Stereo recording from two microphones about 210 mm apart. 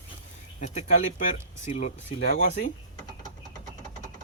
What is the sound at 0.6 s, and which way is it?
Speech, 30° left (ahead or behind).